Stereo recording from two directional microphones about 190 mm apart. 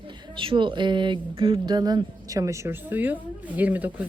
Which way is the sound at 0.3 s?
25° right (ahead or behind).